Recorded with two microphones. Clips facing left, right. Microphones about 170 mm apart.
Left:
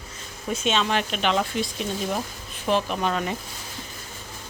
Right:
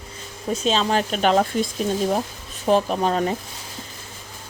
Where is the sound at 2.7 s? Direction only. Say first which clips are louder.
Right 5 dB; 40° right (ahead or behind).